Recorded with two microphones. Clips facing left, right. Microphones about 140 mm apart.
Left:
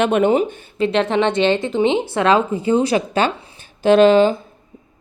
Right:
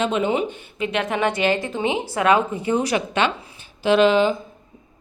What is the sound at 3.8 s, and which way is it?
Speech, 45° left (ahead or behind).